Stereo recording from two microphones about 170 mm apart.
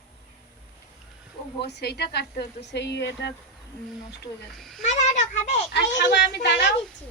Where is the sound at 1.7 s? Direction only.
75° left (ahead or behind).